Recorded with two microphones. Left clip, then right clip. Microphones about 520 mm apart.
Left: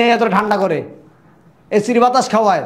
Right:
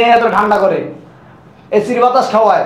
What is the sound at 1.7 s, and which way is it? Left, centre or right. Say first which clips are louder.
Speech: right 2 dB; left.